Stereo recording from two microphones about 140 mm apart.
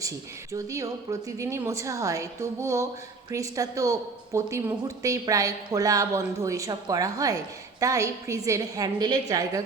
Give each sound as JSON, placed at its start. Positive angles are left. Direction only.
{"t": 0.5, "sound": "a woman's voice", "side_deg": -25}